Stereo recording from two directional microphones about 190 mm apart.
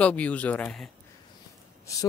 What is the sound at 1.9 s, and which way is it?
Speech, 15° left (ahead or behind).